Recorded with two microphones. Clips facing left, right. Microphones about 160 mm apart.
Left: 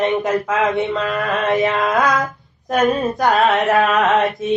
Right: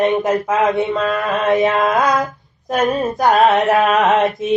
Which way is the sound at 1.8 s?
20° right (ahead or behind).